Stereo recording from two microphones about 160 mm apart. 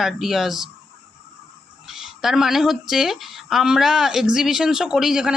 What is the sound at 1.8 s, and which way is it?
Speech, 5° right (ahead or behind).